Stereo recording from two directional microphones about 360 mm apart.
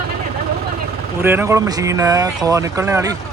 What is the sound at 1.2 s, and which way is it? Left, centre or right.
Speech, centre.